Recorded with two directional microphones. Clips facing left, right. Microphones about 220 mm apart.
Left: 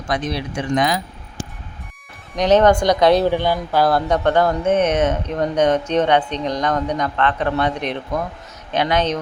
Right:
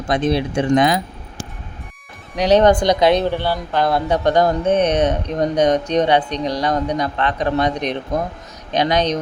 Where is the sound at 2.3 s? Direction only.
10° right (ahead or behind).